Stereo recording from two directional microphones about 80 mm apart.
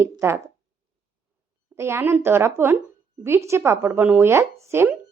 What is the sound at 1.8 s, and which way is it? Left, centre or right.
A woman's voice, right.